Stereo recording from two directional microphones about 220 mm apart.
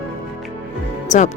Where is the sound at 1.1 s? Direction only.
35° left (ahead or behind).